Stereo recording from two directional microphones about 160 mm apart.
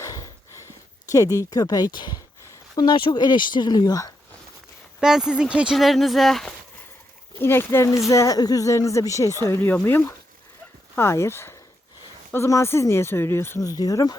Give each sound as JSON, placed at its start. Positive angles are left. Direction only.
{"t": 0.0, "sound": "a sound", "side_deg": 20}
{"t": 1.1, "sound": "speech", "side_deg": 20}
{"t": 4.9, "sound": "speech", "side_deg": -5}
{"t": 7.3, "sound": "speech", "side_deg": 15}